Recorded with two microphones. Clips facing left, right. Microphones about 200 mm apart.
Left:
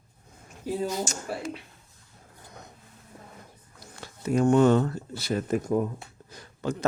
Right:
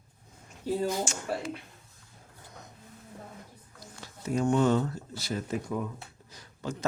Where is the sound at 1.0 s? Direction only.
40° left (ahead or behind).